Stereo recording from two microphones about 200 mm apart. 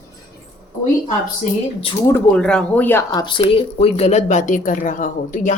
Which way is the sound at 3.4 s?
30° left (ahead or behind).